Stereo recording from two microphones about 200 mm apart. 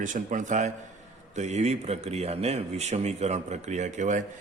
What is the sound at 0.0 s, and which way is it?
Speech, 40° right (ahead or behind).